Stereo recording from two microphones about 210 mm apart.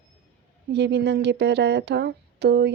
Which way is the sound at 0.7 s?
55° right (ahead or behind).